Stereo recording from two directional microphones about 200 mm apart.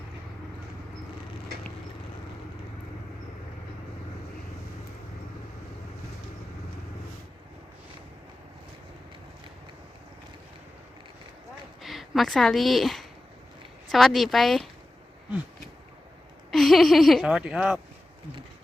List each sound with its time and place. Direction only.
11.8 s speech: centre (ahead or behind)
16.5 s speech: centre (ahead or behind)